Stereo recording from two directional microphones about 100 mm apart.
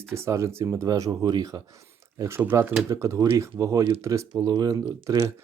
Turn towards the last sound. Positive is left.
turn(degrees=-40)  # may be behind; listen again after turning